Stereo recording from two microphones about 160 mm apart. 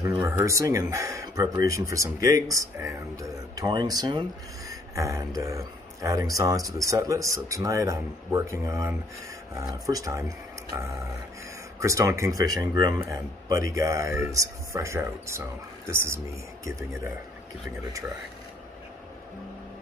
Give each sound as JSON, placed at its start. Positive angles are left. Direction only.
{"t": 0.0, "sound": "speech", "side_deg": -15}
{"t": 11.8, "sound": "speech", "side_deg": -20}